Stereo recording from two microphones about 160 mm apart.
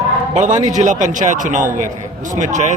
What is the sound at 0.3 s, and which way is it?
Speech, 50° right (ahead or behind).